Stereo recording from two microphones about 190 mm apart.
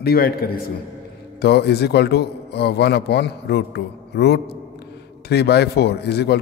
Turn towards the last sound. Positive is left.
turn(degrees=60)  # may be behind; listen again after turning